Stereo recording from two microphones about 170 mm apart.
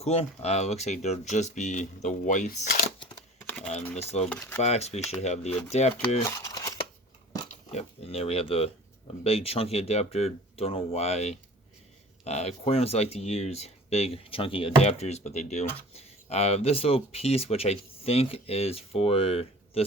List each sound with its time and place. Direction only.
0.0 s speech: 40° left (ahead or behind); by 2.8 s 55° left (ahead or behind)
3.4 s typing: 5° left (ahead or behind)
4.2 s speech: 5° left (ahead or behind)
4.6 s speech: 40° left (ahead or behind)
6.2 s crumpling: 15° left (ahead or behind)
7.7 s speech: 40° left (ahead or behind)